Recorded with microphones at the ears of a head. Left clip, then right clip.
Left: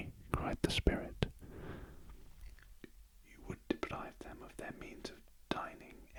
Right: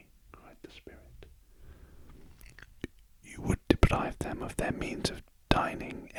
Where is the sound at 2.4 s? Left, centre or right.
Right.